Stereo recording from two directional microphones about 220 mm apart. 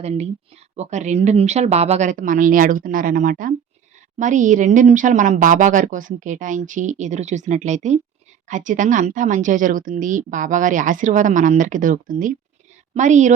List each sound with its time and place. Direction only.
0.0 s a woman's voice: 30° right (ahead or behind)